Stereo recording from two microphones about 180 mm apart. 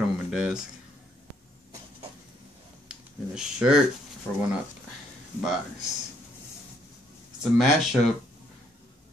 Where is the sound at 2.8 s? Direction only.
5° right (ahead or behind).